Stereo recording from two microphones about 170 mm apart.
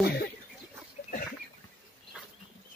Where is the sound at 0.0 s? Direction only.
70° left (ahead or behind).